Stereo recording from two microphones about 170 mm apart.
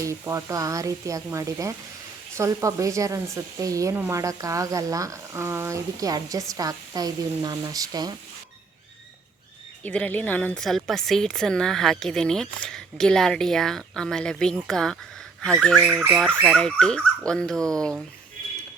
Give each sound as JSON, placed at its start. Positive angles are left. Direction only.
{"t": 0.0, "sound": "speech", "side_deg": -15}
{"t": 9.8, "sound": "a woman's voice", "side_deg": 10}